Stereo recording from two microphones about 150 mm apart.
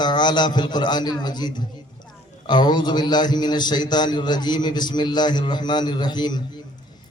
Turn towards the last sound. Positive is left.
turn(degrees=30)  # may be behind; listen again after turning